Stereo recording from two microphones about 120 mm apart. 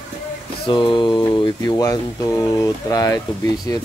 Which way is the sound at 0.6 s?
40° left (ahead or behind).